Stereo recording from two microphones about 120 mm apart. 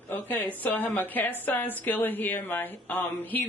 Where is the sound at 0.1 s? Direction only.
15° left (ahead or behind).